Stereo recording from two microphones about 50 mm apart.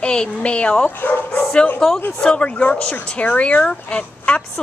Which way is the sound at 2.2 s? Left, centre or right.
Left.